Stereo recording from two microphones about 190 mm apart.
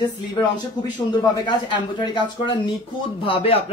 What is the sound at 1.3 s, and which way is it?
Speech, 25° left (ahead or behind).